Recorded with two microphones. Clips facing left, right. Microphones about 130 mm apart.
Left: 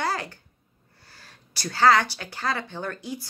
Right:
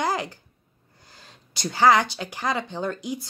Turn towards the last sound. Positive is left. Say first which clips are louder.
# right 4 dB
turn(degrees=-20)  # may be behind; listen again after turning